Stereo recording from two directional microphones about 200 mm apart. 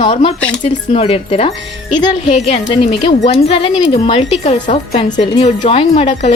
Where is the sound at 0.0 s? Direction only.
25° left (ahead or behind).